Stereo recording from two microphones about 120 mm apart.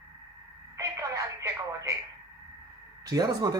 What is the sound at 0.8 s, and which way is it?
Telephone, 25° right (ahead or behind).